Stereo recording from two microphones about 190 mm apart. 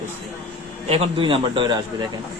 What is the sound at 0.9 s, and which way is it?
A man's voice, 30° right (ahead or behind).